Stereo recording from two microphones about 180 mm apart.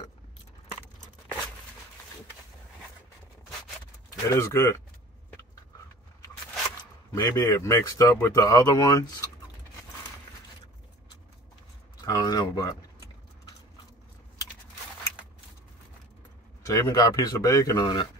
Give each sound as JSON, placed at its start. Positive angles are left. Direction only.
{"t": 4.1, "sound": "speech", "side_deg": 15}
{"t": 7.1, "sound": "speech", "side_deg": 15}
{"t": 12.0, "sound": "speech", "side_deg": 20}
{"t": 16.6, "sound": "speech", "side_deg": 20}